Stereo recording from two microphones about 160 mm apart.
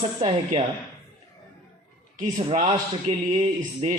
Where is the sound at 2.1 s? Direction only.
50° right (ahead or behind).